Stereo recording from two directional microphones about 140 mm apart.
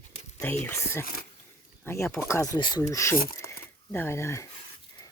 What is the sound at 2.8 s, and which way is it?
Speech, 20° left (ahead or behind).